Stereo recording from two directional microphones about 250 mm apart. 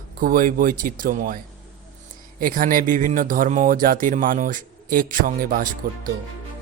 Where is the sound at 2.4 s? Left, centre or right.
Right.